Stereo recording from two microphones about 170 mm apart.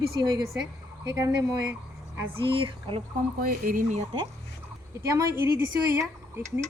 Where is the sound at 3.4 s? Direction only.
55° right (ahead or behind).